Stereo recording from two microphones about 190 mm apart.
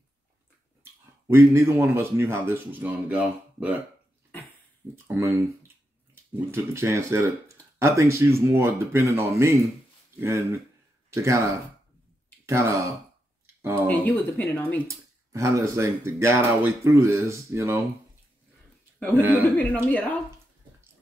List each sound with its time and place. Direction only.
1.2 s speech: 15° right (ahead or behind)
4.9 s speech: 10° right (ahead or behind)
6.3 s speech: 15° right (ahead or behind)
11.1 s speech: 15° right (ahead or behind)
13.6 s a sound: 15° right (ahead or behind)
13.8 s speech: 10° left (ahead or behind)
14.9 s speech: 15° right (ahead or behind)
19.1 s speech: 10° right (ahead or behind)
19.5 s speech: 5° left (ahead or behind)